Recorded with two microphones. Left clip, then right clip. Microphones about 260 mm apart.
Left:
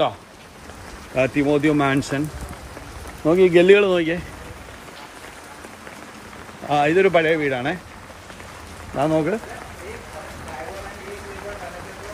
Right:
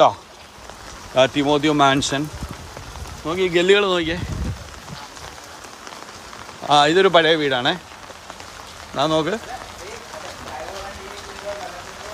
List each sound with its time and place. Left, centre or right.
1.1 s speech: centre
3.3 s speech: centre
6.7 s speech: centre
8.9 s speech: centre